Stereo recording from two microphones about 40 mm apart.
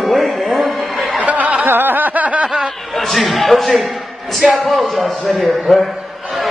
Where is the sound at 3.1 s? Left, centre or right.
Centre.